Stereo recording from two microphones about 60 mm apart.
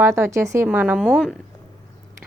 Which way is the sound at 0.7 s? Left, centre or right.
Right.